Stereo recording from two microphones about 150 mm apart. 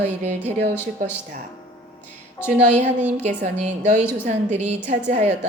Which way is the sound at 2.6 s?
55° right (ahead or behind).